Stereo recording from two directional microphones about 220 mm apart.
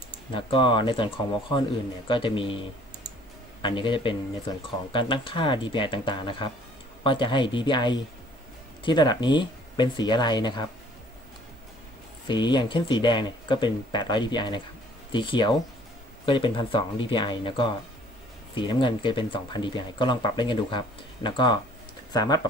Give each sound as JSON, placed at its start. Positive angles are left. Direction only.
{"t": 0.3, "sound": "speech", "side_deg": 20}
{"t": 3.6, "sound": "speech", "side_deg": 20}
{"t": 12.3, "sound": "speech", "side_deg": 20}